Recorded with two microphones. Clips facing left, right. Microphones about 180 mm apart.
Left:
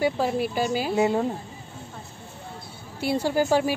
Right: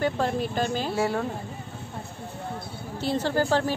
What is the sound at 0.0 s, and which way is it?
Speech, 10° left (ahead or behind).